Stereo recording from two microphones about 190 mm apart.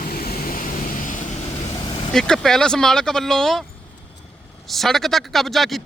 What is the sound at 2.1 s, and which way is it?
Speech, centre (ahead or behind).